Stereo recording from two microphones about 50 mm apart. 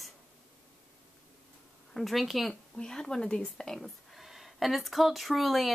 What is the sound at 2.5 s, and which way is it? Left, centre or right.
Speech, centre.